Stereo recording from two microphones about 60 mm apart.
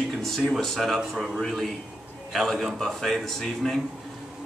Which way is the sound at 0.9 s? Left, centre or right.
Centre.